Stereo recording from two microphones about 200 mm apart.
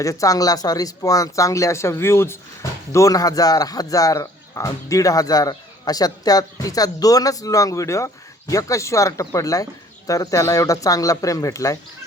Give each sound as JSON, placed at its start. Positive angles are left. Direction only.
{"t": 0.0, "sound": "speech", "side_deg": 15}